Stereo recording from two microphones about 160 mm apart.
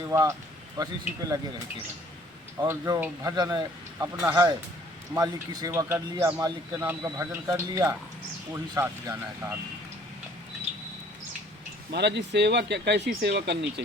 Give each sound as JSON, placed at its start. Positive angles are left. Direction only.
{"t": 0.1, "sound": "speech", "side_deg": -20}
{"t": 2.6, "sound": "speech", "side_deg": -20}
{"t": 11.9, "sound": "speech", "side_deg": -90}